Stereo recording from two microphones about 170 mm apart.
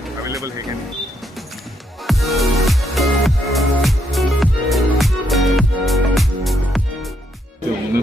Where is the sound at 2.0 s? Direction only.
Centre (ahead or behind).